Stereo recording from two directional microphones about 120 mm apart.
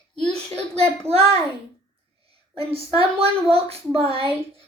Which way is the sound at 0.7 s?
55° right (ahead or behind).